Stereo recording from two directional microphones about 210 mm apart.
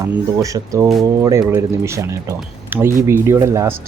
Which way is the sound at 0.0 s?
15° right (ahead or behind).